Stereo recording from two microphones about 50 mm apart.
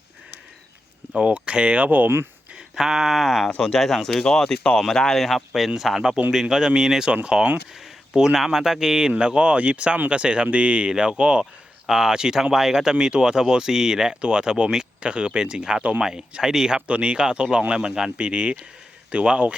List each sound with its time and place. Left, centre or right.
1.1 s speech: right
1.9 s speech: right
2.7 s a sound: centre
3.6 s speech: centre
5.5 s a sound: centre
6.3 s speech: centre
16.8 s speech: right